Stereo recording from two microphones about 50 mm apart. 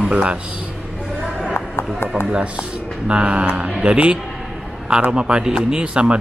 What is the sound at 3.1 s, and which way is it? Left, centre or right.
Speech, right.